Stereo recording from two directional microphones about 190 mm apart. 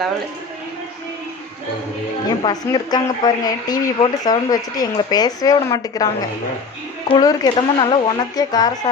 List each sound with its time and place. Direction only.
2.4 s speech: 20° left (ahead or behind)
7.1 s speech: 20° left (ahead or behind)